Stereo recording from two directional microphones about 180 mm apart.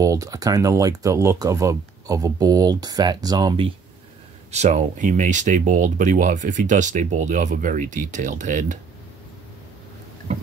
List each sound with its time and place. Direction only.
0.0 s speech: 20° right (ahead or behind)
4.5 s speech: 40° right (ahead or behind)